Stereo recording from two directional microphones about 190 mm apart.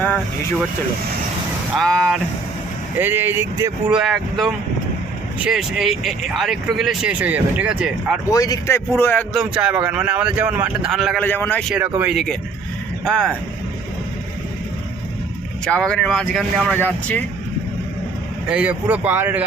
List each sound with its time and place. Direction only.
1.8 s speech: centre (ahead or behind)
3.0 s speech: 10° right (ahead or behind)
3.9 s speech: centre (ahead or behind)
8.3 s speech: 20° left (ahead or behind)
9.3 s speech: 5° right (ahead or behind)
11.7 s speech: 5° right (ahead or behind)
15.6 s speech: 5° left (ahead or behind)
18.4 s speech: 5° right (ahead or behind)